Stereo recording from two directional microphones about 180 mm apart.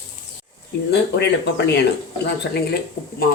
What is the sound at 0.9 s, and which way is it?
Speech, 70° left (ahead or behind).